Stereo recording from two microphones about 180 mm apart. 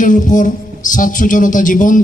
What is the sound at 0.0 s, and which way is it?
A woman's voice, 45° left (ahead or behind).